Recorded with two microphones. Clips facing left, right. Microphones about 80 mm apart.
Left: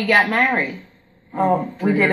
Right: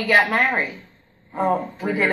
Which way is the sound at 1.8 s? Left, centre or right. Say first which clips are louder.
Left 4 dB; centre.